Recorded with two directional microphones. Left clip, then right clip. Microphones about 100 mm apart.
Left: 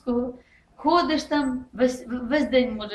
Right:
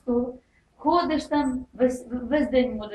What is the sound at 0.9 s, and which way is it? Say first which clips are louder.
A woman's voice: left 1 dB; 20° left (ahead or behind).